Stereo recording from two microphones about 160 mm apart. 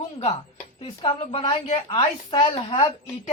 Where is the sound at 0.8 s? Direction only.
35° left (ahead or behind).